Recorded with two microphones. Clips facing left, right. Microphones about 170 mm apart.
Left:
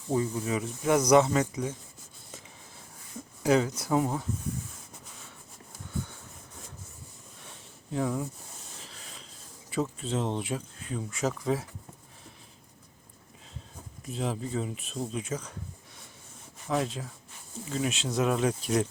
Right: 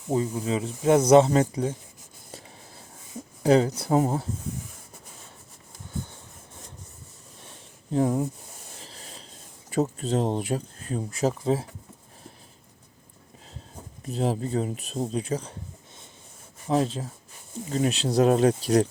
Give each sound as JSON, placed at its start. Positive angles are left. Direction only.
{"t": 0.1, "sound": "speech", "side_deg": -20}
{"t": 3.4, "sound": "speech", "side_deg": -30}
{"t": 7.9, "sound": "speech", "side_deg": -35}
{"t": 8.9, "sound": "rub", "side_deg": -35}
{"t": 9.6, "sound": "speech", "side_deg": -40}
{"t": 14.1, "sound": "speech", "side_deg": -40}
{"t": 16.6, "sound": "speech", "side_deg": -30}